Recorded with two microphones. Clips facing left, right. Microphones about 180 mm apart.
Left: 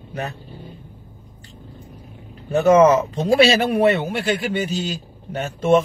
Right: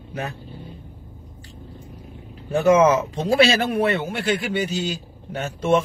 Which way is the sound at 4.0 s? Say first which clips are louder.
Left 2 dB; 60° left (ahead or behind).